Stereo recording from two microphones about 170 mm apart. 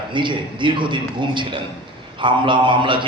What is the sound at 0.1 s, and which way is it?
A man's voice, 30° right (ahead or behind).